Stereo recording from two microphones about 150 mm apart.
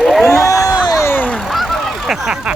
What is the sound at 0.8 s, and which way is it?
Speech, 25° left (ahead or behind).